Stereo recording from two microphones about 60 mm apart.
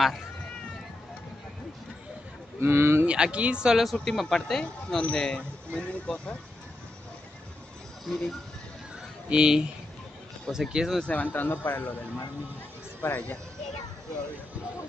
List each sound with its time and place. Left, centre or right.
2.6 s speech: right
3.1 s speech: centre
3.8 s speech: centre
8.0 s speech: centre
9.3 s speech: centre
11.1 s speech: left
13.0 s speech: left